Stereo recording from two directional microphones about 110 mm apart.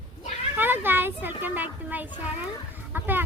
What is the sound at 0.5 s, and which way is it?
A child's voice, 20° right (ahead or behind).